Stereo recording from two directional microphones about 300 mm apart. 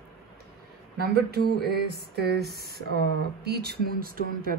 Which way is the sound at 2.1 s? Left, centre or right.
Right.